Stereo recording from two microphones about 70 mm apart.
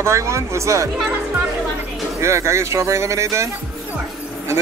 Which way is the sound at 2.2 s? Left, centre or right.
Right.